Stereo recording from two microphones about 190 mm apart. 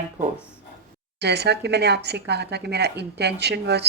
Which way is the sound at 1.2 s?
60° right (ahead or behind).